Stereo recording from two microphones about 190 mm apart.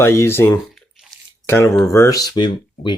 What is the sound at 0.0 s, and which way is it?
Speech, 15° left (ahead or behind).